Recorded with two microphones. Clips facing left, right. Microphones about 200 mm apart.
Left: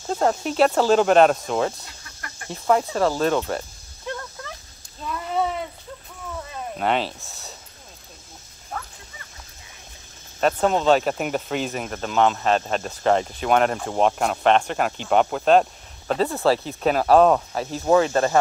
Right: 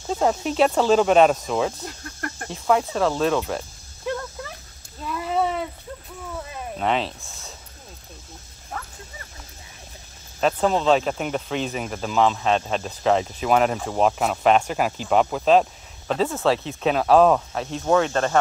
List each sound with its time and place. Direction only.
0.1 s speech: centre (ahead or behind)
1.9 s a sound: 50° right (ahead or behind)
2.5 s speech: centre (ahead or behind)
6.8 s speech: centre (ahead or behind)
10.4 s speech: centre (ahead or behind)